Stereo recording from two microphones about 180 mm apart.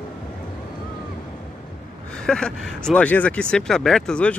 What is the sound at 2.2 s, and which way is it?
Speech, 5° left (ahead or behind).